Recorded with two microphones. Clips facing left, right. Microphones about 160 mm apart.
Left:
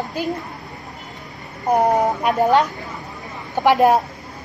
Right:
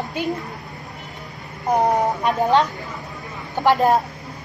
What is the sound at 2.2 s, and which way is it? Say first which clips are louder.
Speech: left 2 dB; 5° left (ahead or behind).